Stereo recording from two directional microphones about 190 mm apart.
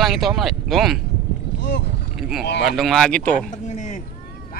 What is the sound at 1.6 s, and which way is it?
Speech, 65° left (ahead or behind).